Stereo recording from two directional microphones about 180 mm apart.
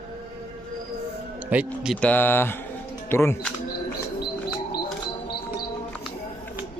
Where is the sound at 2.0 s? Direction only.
10° left (ahead or behind).